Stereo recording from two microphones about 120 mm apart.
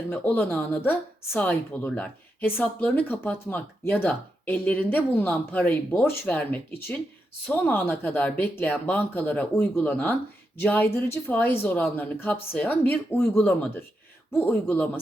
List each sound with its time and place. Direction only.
0.1 s speech: 10° left (ahead or behind)